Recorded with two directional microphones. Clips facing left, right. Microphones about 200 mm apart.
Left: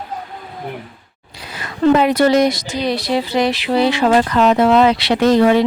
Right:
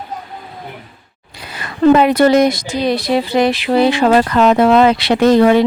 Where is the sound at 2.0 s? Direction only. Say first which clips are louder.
Right 2 dB; 55° right (ahead or behind).